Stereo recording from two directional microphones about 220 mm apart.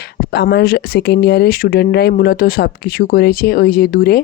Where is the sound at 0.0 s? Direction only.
50° left (ahead or behind).